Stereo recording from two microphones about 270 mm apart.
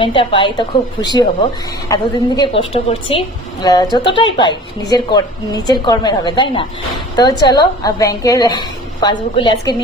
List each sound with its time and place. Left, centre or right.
0.0 s a woman's voice: centre